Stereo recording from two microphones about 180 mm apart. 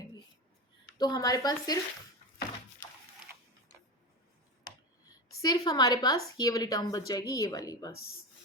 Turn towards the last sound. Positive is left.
turn(degrees=20)  # may be behind; listen again after turning